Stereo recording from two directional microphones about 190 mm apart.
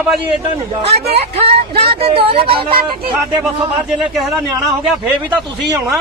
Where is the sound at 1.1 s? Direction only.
30° right (ahead or behind).